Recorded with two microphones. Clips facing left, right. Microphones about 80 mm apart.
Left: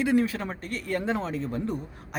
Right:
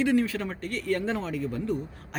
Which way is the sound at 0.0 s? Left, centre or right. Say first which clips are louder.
Even; centre.